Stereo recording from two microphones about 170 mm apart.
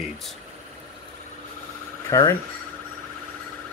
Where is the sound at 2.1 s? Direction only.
20° left (ahead or behind).